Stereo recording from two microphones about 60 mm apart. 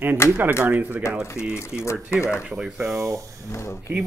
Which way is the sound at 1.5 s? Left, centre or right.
Left.